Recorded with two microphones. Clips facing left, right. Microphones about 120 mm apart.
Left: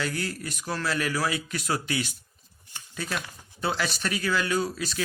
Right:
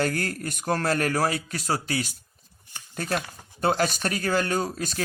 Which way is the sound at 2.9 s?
50° right (ahead or behind).